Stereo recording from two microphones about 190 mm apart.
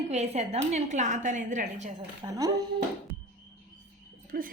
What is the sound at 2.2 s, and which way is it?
Speech, 20° right (ahead or behind).